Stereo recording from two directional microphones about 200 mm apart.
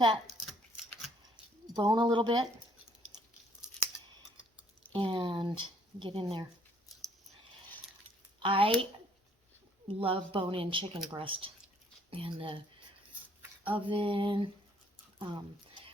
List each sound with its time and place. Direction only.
1.6 s speech: 20° right (ahead or behind)
4.9 s speech: 25° right (ahead or behind)
8.4 s speech: 25° right (ahead or behind)
10.0 s speech: 25° right (ahead or behind)
13.7 s speech: 25° right (ahead or behind)